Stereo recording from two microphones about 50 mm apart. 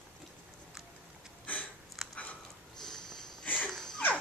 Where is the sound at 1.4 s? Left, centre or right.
Left.